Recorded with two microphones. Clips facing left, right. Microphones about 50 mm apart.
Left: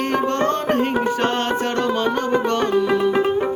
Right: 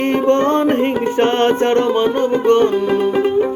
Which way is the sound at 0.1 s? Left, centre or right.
Right.